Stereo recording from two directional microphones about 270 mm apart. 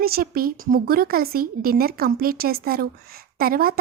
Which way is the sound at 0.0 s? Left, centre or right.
Right.